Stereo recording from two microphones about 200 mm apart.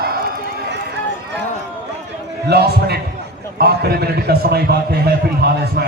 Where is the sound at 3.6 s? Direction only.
50° right (ahead or behind).